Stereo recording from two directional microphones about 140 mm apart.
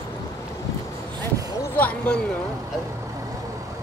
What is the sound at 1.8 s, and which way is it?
Speech, 10° left (ahead or behind).